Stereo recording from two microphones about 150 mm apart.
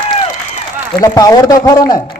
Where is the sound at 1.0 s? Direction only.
25° left (ahead or behind).